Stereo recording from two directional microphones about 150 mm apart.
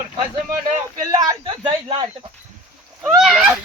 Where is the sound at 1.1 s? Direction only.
25° right (ahead or behind).